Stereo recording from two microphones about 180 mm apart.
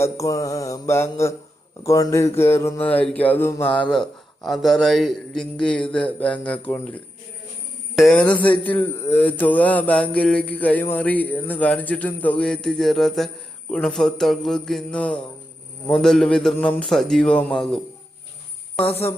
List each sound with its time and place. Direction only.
0.0 s a man's voice: 15° left (ahead or behind)
7.9 s a man's voice: 5° left (ahead or behind)
18.8 s speech: 30° left (ahead or behind)